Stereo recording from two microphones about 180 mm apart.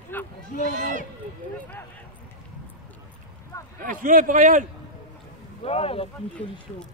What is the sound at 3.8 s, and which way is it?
Speech, 50° right (ahead or behind).